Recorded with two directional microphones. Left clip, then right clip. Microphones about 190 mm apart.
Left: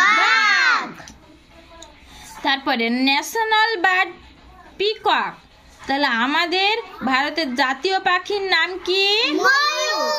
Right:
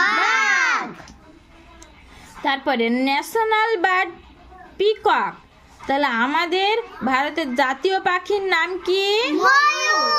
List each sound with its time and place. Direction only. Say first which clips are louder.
0.2 s babbling: left 2 dB; 10° right (ahead or behind)
2.4 s a woman's voice: even; 10° right (ahead or behind)
9.4 s a child's voice: right 4 dB; 30° right (ahead or behind)